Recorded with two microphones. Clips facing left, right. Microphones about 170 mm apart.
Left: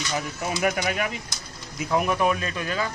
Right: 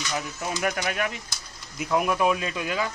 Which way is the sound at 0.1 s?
5° left (ahead or behind).